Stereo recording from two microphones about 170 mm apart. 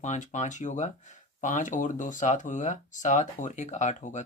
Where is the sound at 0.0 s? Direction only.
45° left (ahead or behind).